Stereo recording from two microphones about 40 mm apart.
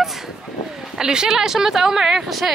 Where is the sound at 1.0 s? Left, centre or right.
Centre.